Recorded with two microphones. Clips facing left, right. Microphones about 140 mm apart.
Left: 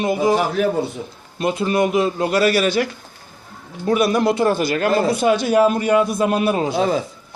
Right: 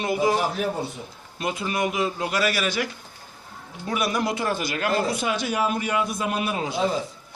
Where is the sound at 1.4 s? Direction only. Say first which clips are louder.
Left 8 dB; 30° left (ahead or behind).